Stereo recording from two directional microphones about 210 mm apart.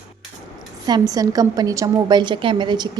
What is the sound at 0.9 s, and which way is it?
A woman's voice, 20° right (ahead or behind).